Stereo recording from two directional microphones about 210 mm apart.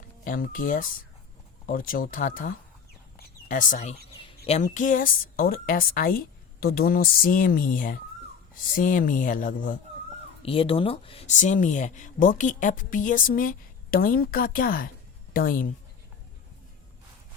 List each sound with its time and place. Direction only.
0.3 s speech: 40° left (ahead or behind)
10.4 s speech: 25° left (ahead or behind); by 15.6 s 45° left (ahead or behind)